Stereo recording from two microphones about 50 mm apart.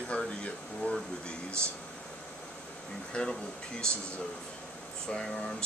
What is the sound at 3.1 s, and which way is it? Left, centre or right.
Speech, centre.